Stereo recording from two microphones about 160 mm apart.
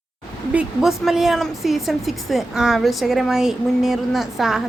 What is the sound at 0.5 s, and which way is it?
A woman's voice, centre (ahead or behind).